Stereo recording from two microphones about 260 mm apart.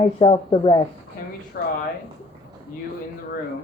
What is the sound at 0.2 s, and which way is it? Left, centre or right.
Speech, centre.